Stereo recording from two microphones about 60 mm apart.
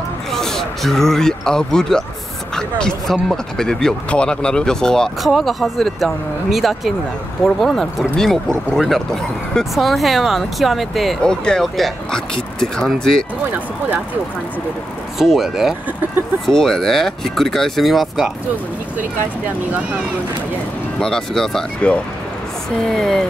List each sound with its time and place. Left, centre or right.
0.3 s speech: centre
11.2 s speech: centre
13.5 s speech: right
15.1 s speech: centre
16.4 s speech: centre
21.0 s speech: centre
22.8 s speech: centre